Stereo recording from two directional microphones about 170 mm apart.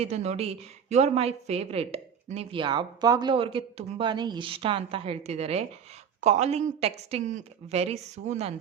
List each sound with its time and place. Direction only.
0.0 s a woman's voice: 40° right (ahead or behind)